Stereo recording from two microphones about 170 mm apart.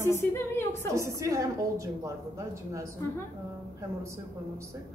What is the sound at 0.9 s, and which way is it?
A woman's voice, 15° right (ahead or behind).